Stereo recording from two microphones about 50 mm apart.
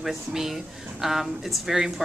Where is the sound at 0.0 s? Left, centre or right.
Centre.